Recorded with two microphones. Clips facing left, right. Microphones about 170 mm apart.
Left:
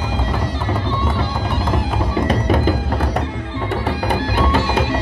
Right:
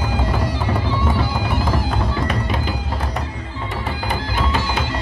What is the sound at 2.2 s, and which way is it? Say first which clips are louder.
Music: left 6 dB; 40° left (ahead or behind).